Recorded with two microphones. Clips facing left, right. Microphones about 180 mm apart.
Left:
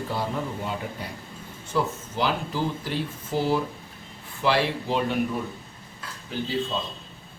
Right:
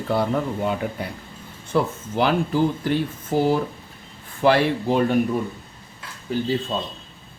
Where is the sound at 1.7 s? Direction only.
60° right (ahead or behind).